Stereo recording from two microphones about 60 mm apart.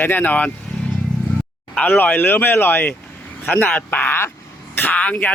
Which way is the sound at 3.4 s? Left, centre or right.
Centre.